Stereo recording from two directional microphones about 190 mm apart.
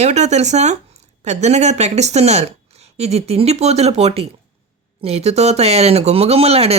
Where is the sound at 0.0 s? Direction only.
35° right (ahead or behind).